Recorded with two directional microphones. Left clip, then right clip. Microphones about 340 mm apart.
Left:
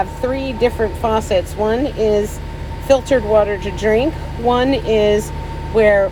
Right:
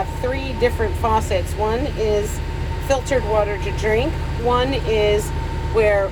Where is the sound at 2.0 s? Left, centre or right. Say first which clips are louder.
Left 4 dB; left.